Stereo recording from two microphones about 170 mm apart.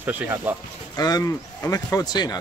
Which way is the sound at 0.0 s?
10° right (ahead or behind).